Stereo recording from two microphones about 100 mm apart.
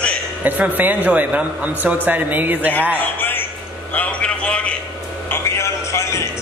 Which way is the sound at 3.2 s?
20° left (ahead or behind).